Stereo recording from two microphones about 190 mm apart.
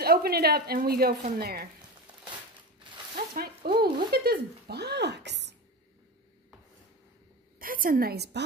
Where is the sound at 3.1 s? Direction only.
50° right (ahead or behind).